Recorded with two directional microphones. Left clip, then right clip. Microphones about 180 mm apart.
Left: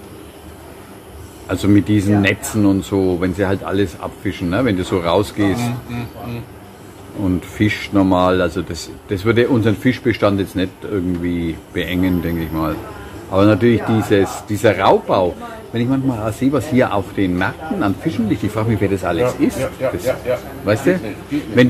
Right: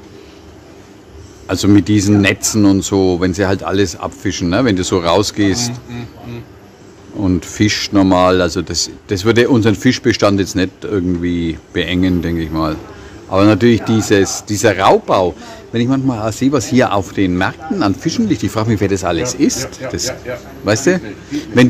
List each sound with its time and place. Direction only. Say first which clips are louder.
1.5 s speech: right 3 dB; 50° right (ahead or behind)
7.2 s speech: right 3 dB; 50° right (ahead or behind)
19.6 s speech: left 3 dB; centre (ahead or behind)